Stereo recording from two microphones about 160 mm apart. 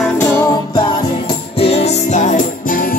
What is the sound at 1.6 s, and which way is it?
Music, 40° left (ahead or behind).